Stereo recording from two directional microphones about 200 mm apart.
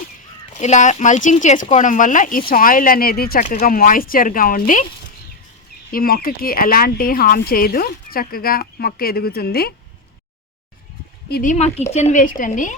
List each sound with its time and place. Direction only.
0.5 s speech: 35° left (ahead or behind)
5.9 s speech: 45° left (ahead or behind)
11.3 s speech: 50° left (ahead or behind)
11.5 s speech: 35° left (ahead or behind)